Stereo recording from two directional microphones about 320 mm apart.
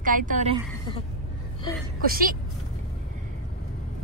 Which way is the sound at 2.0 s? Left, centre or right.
Right.